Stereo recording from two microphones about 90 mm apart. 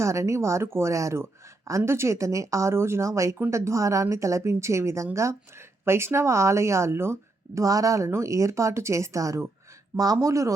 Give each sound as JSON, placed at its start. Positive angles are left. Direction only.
{"t": 0.0, "sound": "speech", "side_deg": -35}